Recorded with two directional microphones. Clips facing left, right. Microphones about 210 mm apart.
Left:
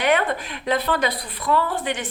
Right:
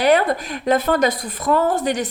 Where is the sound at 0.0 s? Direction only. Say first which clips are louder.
Right 5 dB; 35° right (ahead or behind).